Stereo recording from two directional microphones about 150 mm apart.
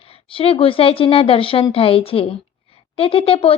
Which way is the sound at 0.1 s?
40° left (ahead or behind).